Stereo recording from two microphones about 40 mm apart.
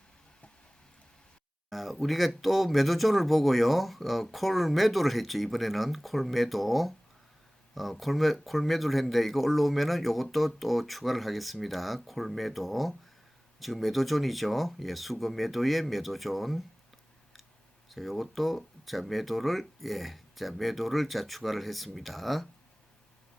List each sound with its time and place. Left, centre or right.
1.7 s speech: centre
17.8 s speech: centre